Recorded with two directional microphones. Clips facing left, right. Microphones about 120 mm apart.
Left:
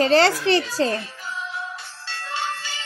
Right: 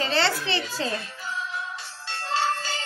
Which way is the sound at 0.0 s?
45° left (ahead or behind).